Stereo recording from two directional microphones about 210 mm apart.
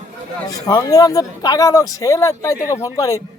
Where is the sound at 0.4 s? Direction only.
15° left (ahead or behind).